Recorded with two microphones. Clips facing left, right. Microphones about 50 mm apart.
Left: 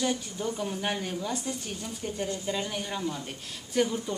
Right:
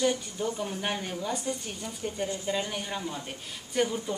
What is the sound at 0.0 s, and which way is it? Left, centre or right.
A woman's voice, centre.